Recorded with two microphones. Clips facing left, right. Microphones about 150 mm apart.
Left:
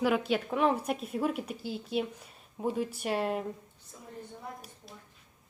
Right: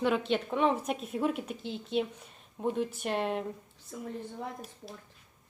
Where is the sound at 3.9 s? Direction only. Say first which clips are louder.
Right 11 dB; 85° right.